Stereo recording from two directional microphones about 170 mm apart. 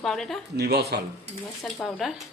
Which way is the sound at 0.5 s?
70° right (ahead or behind).